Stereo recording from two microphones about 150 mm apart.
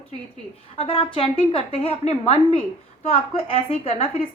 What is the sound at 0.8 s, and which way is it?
A woman's voice, 35° left (ahead or behind).